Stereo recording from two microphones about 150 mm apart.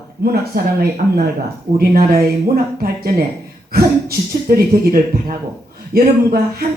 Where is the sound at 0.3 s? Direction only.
90° right.